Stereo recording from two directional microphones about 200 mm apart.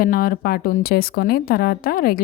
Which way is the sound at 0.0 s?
45° left (ahead or behind).